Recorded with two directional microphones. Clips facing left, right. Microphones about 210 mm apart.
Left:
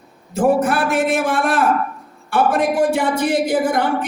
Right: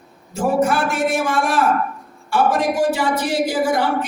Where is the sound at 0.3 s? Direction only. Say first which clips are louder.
Left 2 dB; 55° left (ahead or behind).